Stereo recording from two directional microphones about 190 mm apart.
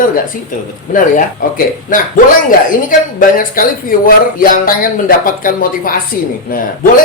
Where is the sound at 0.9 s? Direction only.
45° left (ahead or behind).